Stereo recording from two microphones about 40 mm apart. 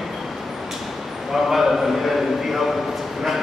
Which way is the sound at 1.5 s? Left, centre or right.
Centre.